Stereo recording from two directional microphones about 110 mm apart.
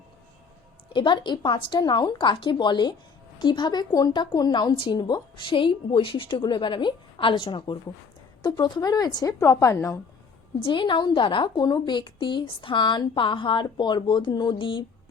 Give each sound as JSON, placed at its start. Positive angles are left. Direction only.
{"t": 0.9, "sound": "a woman's voice", "side_deg": 45}
{"t": 10.6, "sound": "speech", "side_deg": 50}